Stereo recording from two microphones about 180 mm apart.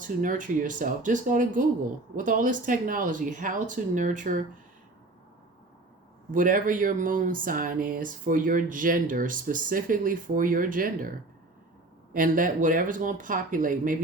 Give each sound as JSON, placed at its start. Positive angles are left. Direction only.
{"t": 0.0, "sound": "speech", "side_deg": -45}
{"t": 6.3, "sound": "speech", "side_deg": -50}
{"t": 12.1, "sound": "speech", "side_deg": -50}